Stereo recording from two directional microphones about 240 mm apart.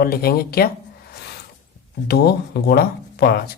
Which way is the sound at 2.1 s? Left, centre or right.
Left.